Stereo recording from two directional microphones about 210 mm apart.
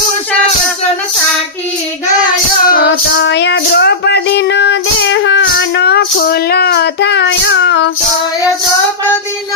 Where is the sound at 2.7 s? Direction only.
50° left (ahead or behind).